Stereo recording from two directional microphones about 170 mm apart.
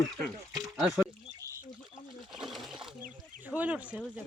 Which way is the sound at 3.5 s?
10° right (ahead or behind).